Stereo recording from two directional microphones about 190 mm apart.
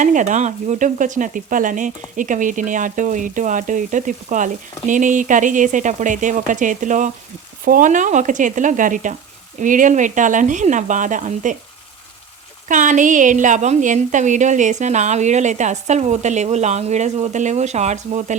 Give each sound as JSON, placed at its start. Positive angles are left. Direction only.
{"t": 0.0, "sound": "sizzle", "side_deg": -40}
{"t": 9.6, "sound": "a woman's voice", "side_deg": -45}
{"t": 12.6, "sound": "a woman's voice", "side_deg": -40}